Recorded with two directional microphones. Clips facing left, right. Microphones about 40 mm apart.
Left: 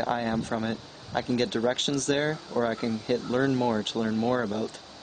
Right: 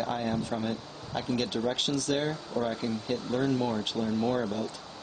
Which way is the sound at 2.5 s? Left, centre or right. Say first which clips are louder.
Left 4 dB; centre.